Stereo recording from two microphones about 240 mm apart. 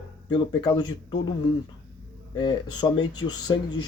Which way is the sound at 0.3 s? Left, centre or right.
Centre.